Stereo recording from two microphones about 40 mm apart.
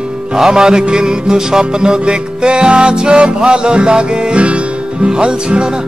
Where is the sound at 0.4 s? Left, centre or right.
Centre.